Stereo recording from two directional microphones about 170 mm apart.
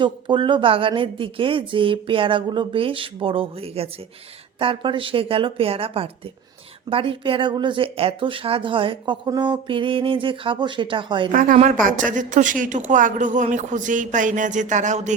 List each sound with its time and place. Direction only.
0.0 s speech: 30° right (ahead or behind)
11.3 s speech: 50° right (ahead or behind)